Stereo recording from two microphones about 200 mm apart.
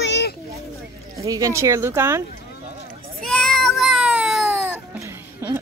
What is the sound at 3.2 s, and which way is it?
Meow, 5° left (ahead or behind).